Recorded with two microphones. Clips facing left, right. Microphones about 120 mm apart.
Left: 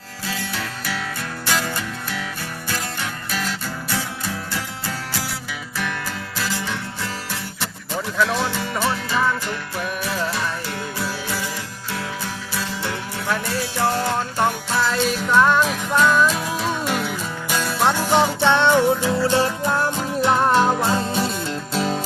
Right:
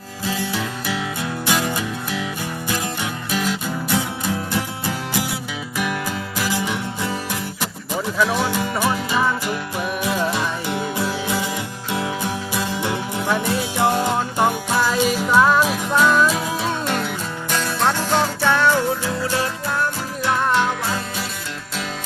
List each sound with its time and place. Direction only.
0.3 s music: 15° right (ahead or behind)
6.3 s music: 15° right (ahead or behind); by 20.4 s 25° left (ahead or behind)
20.4 s music: 35° left (ahead or behind)